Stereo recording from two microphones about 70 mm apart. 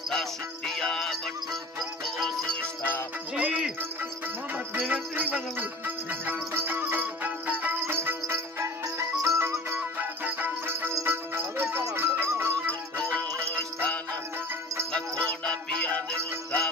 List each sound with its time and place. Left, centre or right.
0.1 s music: centre
3.3 s music: centre
4.8 s music: right
7.8 s music: right
10.2 s music: right
10.9 s music: right
12.9 s music: centre